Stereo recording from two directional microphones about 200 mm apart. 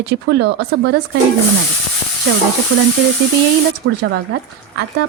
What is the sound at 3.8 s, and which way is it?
Speech, 85° right.